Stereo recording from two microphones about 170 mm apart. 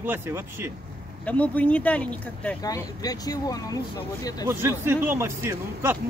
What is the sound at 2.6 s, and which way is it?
Speech, 20° left (ahead or behind).